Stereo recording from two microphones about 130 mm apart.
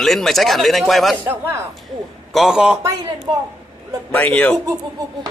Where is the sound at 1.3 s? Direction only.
15° right (ahead or behind).